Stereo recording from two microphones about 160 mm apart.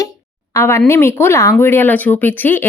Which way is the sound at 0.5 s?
15° left (ahead or behind).